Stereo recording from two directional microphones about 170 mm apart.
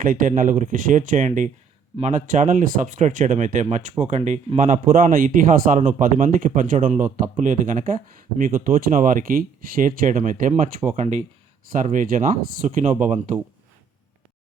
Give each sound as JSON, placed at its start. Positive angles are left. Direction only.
{"t": 0.0, "sound": "speech", "side_deg": -55}